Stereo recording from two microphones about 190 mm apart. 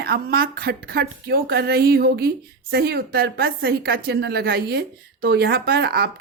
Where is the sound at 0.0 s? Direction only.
55° right (ahead or behind).